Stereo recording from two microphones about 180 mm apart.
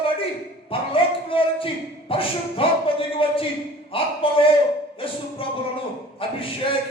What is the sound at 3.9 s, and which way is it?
Speech, 30° left (ahead or behind).